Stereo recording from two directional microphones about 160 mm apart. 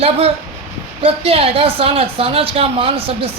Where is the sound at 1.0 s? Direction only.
35° right (ahead or behind).